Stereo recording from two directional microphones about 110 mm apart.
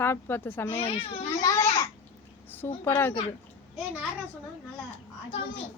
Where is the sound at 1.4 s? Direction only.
30° left (ahead or behind).